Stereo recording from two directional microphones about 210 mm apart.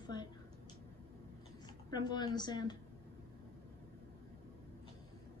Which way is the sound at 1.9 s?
20° left (ahead or behind).